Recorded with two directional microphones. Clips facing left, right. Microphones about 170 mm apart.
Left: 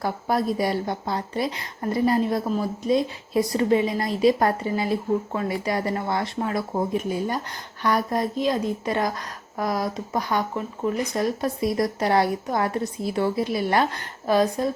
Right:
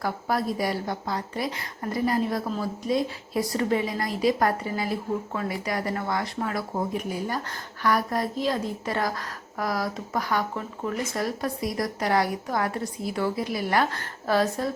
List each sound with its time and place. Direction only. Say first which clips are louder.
0.0 s a woman's voice: left 3 dB; 25° left (ahead or behind)